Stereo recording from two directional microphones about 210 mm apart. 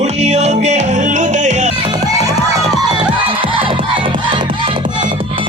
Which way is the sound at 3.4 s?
25° right (ahead or behind).